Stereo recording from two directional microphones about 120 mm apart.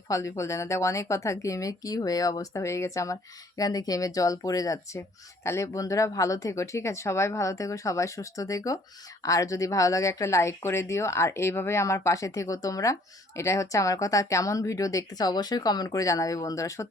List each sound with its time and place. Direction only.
0.1 s speech: 25° left (ahead or behind)